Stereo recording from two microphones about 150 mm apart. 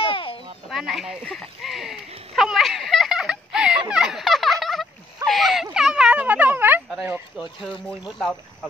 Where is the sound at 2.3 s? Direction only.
Centre (ahead or behind).